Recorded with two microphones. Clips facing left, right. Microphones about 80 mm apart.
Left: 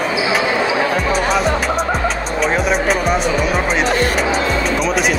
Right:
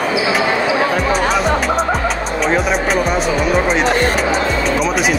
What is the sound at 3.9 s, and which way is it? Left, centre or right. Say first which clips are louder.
Speech: right 1 dB; right.